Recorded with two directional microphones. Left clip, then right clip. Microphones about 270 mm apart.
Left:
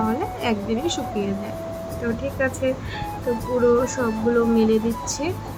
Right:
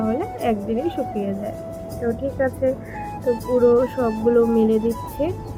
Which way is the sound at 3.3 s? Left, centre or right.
Centre.